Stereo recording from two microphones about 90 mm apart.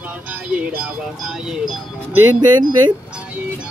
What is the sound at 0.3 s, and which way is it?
Speech, 15° right (ahead or behind).